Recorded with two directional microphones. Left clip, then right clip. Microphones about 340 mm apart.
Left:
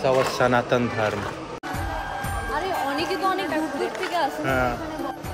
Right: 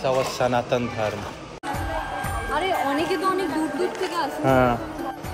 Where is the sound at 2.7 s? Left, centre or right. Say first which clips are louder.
Right 2 dB; centre.